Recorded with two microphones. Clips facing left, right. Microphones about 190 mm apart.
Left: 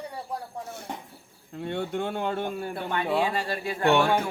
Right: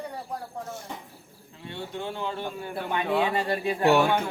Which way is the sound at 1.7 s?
55° left (ahead or behind).